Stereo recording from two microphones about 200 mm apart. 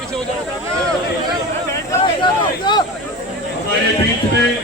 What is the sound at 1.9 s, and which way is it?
Speech, 20° left (ahead or behind).